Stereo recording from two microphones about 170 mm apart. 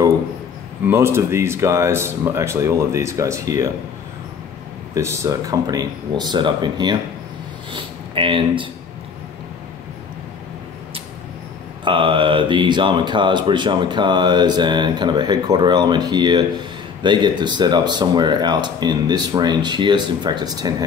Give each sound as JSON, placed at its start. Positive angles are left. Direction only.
{"t": 0.8, "sound": "speech", "side_deg": -15}
{"t": 4.9, "sound": "speech", "side_deg": -15}
{"t": 11.8, "sound": "speech", "side_deg": -30}